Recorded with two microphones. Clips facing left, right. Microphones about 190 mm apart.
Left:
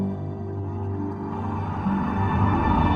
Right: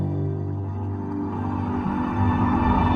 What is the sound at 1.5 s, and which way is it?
Music, centre (ahead or behind).